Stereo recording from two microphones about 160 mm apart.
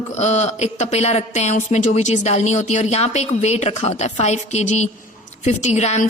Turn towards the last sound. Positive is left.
turn(degrees=45)  # may be behind; listen again after turning